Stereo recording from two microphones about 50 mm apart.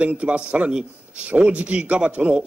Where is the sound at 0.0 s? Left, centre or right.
Right.